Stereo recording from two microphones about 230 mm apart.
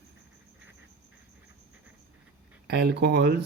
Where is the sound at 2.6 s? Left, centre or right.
Right.